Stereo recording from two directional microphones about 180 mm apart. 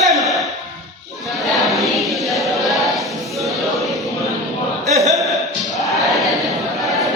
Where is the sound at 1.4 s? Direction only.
Centre (ahead or behind).